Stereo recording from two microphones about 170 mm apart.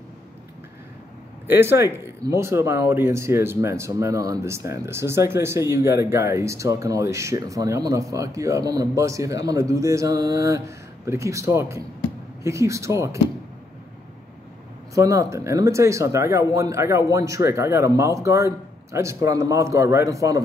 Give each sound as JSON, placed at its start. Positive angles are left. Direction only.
{"t": 1.5, "sound": "speech", "side_deg": -15}
{"t": 15.0, "sound": "speech", "side_deg": -20}